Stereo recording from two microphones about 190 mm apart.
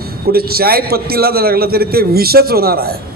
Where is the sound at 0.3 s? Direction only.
55° right (ahead or behind).